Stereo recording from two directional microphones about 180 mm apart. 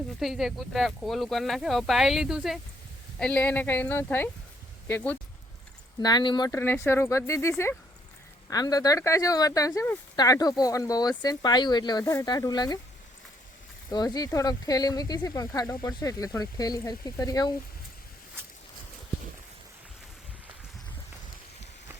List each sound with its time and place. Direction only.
0.2 s speech: centre (ahead or behind)
3.2 s speech: 5° left (ahead or behind)
6.0 s speech: 25° left (ahead or behind)
13.9 s speech: 20° left (ahead or behind)